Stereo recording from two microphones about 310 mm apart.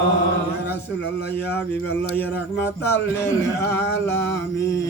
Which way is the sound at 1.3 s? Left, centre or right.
Centre.